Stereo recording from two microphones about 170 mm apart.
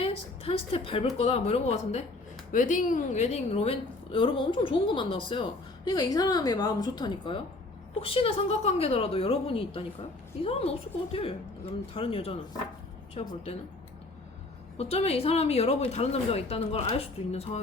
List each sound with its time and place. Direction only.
0.0 s a woman's voice: 35° left (ahead or behind)
14.8 s a woman's voice: 35° left (ahead or behind)